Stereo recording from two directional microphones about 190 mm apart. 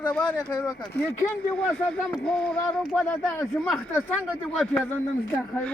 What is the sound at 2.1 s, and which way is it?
Speech, 5° left (ahead or behind).